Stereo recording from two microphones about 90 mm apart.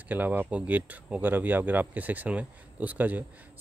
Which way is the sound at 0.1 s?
20° right (ahead or behind).